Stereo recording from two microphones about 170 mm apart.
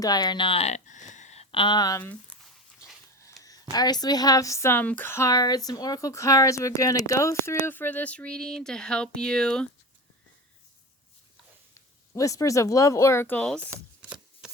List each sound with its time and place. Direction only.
0.0 s speech: 25° left (ahead or behind)
2.0 s speech: 10° left (ahead or behind)
11.7 s speech: 20° left (ahead or behind)